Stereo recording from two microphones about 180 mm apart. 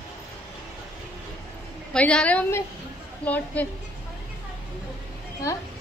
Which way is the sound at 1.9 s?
5° left (ahead or behind).